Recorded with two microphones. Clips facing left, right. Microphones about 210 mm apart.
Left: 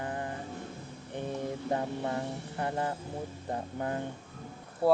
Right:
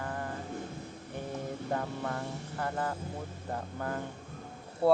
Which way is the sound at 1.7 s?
20° left (ahead or behind).